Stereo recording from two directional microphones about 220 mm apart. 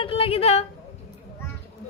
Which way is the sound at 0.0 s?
25° left (ahead or behind).